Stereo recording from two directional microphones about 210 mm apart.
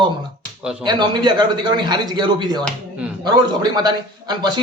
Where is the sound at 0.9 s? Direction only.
20° right (ahead or behind).